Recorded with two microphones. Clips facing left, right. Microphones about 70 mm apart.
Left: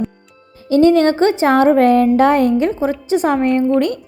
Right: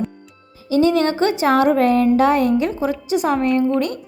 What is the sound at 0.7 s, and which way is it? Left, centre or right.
A woman's voice, left.